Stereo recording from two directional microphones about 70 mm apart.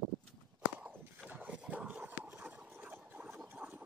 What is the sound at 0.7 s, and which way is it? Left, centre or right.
Horse, centre.